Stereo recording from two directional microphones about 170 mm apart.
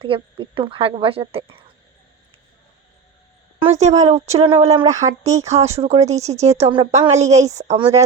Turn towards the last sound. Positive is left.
turn(degrees=-40)  # may be behind; listen again after turning